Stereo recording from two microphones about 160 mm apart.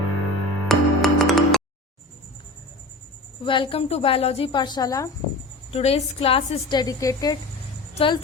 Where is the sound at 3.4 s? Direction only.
30° left (ahead or behind).